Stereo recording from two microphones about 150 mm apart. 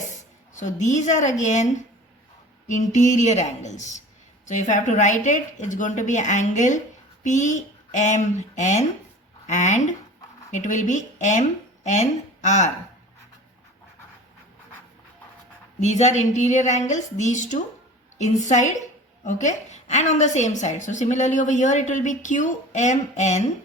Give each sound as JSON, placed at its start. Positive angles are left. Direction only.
{"t": 0.1, "sound": "speech", "side_deg": 55}
{"t": 2.6, "sound": "a woman's voice", "side_deg": 55}
{"t": 15.8, "sound": "a woman's voice", "side_deg": 50}